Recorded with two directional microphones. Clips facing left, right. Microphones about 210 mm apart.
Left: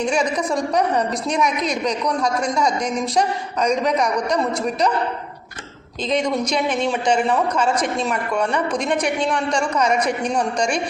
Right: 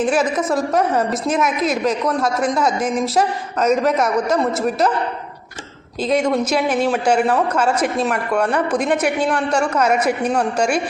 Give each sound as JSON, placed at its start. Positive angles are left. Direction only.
{"t": 0.0, "sound": "a woman's voice", "side_deg": -5}
{"t": 6.0, "sound": "a woman's voice", "side_deg": -5}